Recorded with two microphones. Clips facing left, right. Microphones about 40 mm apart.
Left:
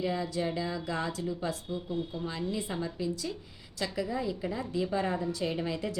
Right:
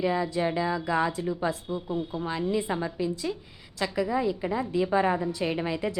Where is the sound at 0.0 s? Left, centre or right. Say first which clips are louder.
Right 5 dB; right.